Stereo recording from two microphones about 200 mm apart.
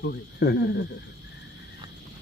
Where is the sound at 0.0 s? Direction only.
55° left (ahead or behind).